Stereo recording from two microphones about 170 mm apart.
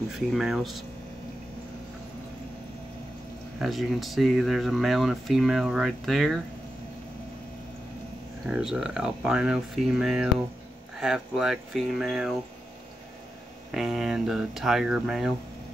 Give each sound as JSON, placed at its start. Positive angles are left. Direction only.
{"t": 0.3, "sound": "speech", "side_deg": 0}
{"t": 3.6, "sound": "speech", "side_deg": 0}
{"t": 8.5, "sound": "speech", "side_deg": -5}
{"t": 13.7, "sound": "speech", "side_deg": 0}